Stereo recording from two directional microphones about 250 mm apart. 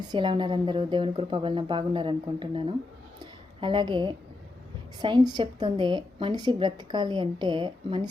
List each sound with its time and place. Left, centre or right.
0.1 s a woman's voice: centre